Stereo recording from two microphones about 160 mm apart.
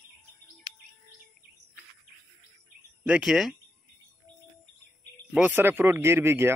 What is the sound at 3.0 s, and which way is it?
Speech, 5° right (ahead or behind).